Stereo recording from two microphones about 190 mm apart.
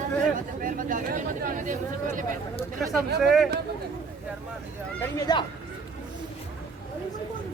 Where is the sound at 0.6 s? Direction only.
45° right (ahead or behind).